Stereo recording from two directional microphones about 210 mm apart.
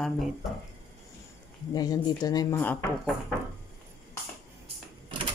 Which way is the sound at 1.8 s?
20° left (ahead or behind).